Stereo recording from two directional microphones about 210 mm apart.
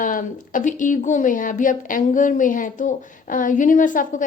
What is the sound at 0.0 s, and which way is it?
A woman's voice, 40° left (ahead or behind).